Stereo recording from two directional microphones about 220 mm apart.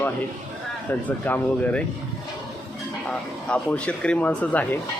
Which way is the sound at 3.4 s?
5° left (ahead or behind).